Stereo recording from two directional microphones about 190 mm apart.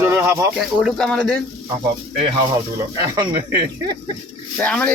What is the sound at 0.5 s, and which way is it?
Speech, centre (ahead or behind).